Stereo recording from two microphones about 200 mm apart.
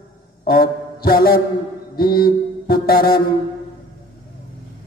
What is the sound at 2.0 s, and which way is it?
Mantra, 50° left (ahead or behind).